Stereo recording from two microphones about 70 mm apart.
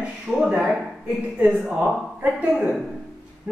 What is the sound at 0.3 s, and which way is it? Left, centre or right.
A woman's voice, centre.